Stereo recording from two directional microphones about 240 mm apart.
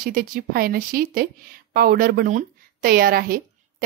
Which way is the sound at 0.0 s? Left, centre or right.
Right.